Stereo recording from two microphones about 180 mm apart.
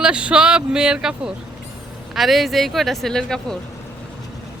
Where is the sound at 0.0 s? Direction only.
5° right (ahead or behind).